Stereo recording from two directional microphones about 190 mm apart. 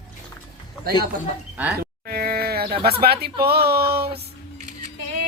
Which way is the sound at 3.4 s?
55° right (ahead or behind).